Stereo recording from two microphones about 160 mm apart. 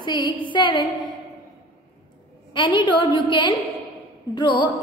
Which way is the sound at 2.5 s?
30° left (ahead or behind).